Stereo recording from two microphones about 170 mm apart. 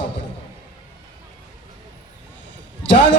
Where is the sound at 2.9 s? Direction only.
90° left.